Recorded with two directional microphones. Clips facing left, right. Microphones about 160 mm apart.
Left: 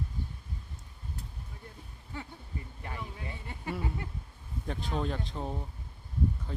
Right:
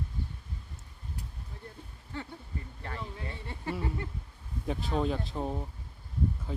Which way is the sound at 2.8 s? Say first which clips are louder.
Right 2 dB; 15° left (ahead or behind).